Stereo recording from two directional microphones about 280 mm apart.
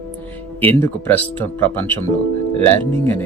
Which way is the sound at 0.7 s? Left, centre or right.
Centre.